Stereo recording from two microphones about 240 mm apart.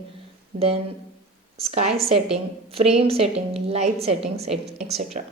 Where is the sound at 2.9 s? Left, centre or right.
Right.